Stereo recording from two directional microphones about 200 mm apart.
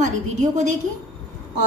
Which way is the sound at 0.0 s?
35° right (ahead or behind).